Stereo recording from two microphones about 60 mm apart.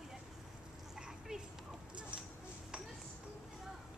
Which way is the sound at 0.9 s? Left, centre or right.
Centre.